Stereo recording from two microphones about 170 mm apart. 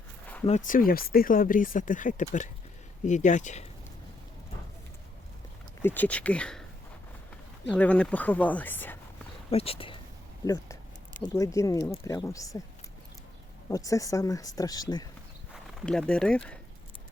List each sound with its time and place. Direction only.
0.4 s speech: 45° left (ahead or behind)
5.8 s a woman's voice: 10° left (ahead or behind)
7.7 s a woman's voice: 10° left (ahead or behind)
9.5 s speech: 35° left (ahead or behind)
10.4 s speech: 20° left (ahead or behind)
13.7 s speech: 20° left (ahead or behind)
15.8 s speech: 5° left (ahead or behind)